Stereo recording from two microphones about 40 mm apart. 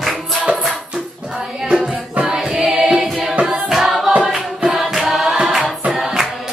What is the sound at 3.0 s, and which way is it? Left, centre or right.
Music, centre.